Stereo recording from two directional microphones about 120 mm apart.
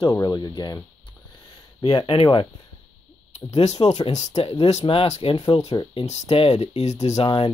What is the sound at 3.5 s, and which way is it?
Speech, 65° left (ahead or behind).